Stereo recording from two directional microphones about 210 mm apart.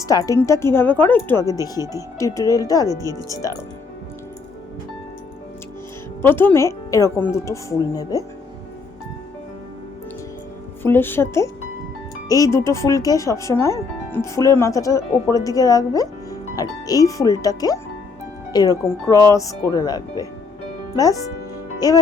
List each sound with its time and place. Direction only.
0.0 s speech: 15° left (ahead or behind)
2.9 s speech: 15° right (ahead or behind)
3.2 s speech: 15° left (ahead or behind)
6.2 s speech: 10° left (ahead or behind)
10.8 s speech: 10° left (ahead or behind)